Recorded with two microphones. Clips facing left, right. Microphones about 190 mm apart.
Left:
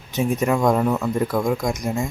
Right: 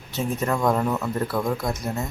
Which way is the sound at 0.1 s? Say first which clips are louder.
Left 5 dB; 10° left (ahead or behind).